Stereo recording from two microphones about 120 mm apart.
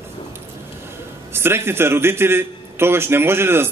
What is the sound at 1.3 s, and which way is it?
A man's voice, 20° right (ahead or behind).